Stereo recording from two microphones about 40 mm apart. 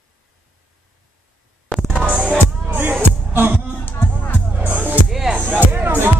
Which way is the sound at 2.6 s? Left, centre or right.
Right.